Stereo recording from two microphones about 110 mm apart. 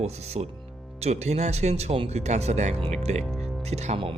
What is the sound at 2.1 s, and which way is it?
Speech, 90° right.